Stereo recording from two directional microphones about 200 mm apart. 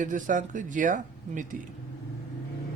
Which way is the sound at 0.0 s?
40° right (ahead or behind).